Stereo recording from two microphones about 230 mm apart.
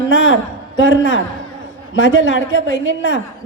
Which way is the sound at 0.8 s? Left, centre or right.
Left.